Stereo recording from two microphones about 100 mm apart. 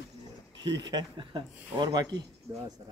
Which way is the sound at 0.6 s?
45° right (ahead or behind).